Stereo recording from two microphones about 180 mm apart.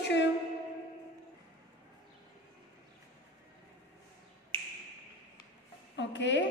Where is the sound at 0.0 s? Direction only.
80° left.